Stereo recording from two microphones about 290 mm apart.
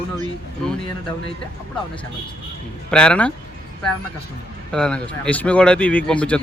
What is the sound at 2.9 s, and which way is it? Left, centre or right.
Speech, centre.